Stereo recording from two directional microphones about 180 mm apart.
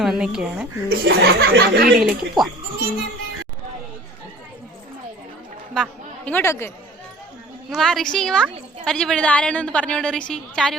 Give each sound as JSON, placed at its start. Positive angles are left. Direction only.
{"t": 0.0, "sound": "a woman's voice", "side_deg": -5}
{"t": 0.9, "sound": "speech", "side_deg": -60}
{"t": 2.0, "sound": "a woman's voice", "side_deg": 0}
{"t": 5.7, "sound": "a woman's voice", "side_deg": 5}
{"t": 7.7, "sound": "a woman's voice", "side_deg": 0}